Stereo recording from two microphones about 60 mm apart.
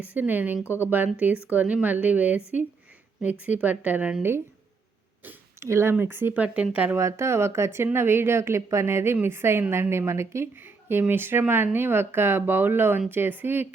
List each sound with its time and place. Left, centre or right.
0.1 s a woman's voice: right
5.5 s speech: right
5.9 s speech: right
6.3 s a woman's voice: right
6.9 s speech: right
10.6 s a sound: right
11.1 s speech: right